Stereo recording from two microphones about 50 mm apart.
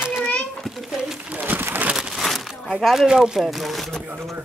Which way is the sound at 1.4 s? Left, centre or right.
Right.